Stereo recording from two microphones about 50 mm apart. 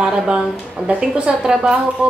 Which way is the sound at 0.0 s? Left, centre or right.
Centre.